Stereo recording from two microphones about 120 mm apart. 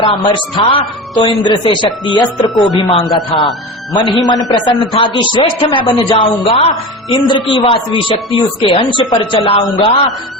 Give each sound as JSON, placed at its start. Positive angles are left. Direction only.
{"t": 0.0, "sound": "a man's voice", "side_deg": 45}
{"t": 7.3, "sound": "a man's voice", "side_deg": 45}